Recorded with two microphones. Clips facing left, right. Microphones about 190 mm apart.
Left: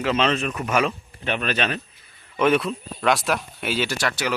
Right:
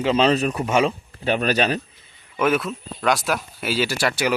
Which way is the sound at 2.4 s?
5° right (ahead or behind).